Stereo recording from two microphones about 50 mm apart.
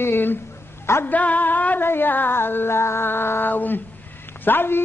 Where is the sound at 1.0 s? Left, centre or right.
Left.